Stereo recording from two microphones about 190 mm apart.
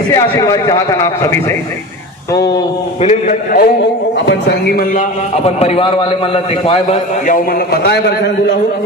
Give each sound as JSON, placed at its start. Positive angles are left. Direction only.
{"t": 0.1, "sound": "a man's voice", "side_deg": 20}
{"t": 3.0, "sound": "a man's voice", "side_deg": 40}
{"t": 4.3, "sound": "a man's voice", "side_deg": 60}
{"t": 5.5, "sound": "a man's voice", "side_deg": 30}
{"t": 7.3, "sound": "a man's voice", "side_deg": 50}